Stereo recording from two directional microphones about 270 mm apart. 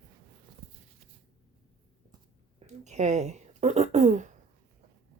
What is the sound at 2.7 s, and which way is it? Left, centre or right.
Throat clearing, right.